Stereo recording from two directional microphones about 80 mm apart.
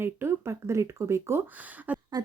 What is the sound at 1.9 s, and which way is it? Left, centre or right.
Speech, centre.